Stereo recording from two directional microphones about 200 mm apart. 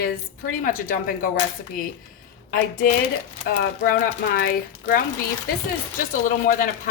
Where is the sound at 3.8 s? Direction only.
45° left (ahead or behind).